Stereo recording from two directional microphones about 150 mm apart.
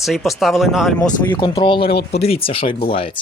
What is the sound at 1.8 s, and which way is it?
Speech, 90° left.